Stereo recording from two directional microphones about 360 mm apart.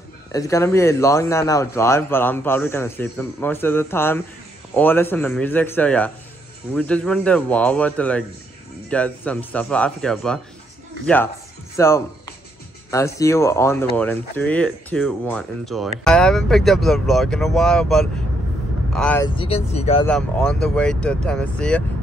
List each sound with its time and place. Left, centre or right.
0.3 s a man's voice: centre
11.7 s a sound: centre
12.9 s a man's voice: centre
19.3 s a man's voice: centre
20.1 s speech: centre